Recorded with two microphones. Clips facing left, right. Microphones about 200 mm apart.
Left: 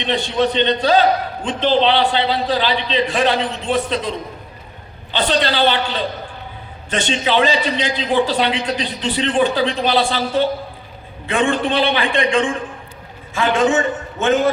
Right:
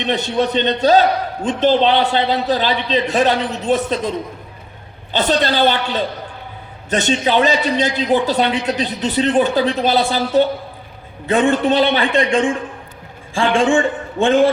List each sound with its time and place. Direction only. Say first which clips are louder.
0.0 s a man's voice: even; 45° right (ahead or behind)
5.1 s a man's voice: right 2 dB; 45° right (ahead or behind)
13.3 s a man's voice: right 1 dB; 30° right (ahead or behind)